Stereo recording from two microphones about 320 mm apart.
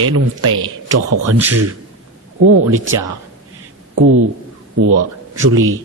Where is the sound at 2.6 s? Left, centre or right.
Right.